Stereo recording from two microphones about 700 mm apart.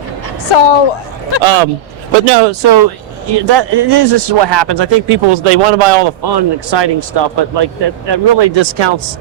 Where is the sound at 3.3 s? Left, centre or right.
Right.